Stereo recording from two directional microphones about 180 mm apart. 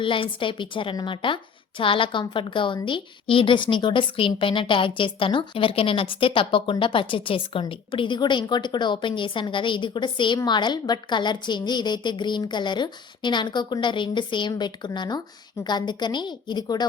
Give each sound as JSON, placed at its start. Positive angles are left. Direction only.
{"t": 0.0, "sound": "a woman's voice", "side_deg": 30}